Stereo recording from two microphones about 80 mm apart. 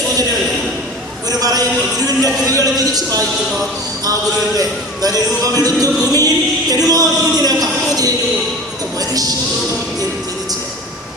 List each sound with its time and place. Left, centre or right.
1.3 s music: right
4.0 s music: right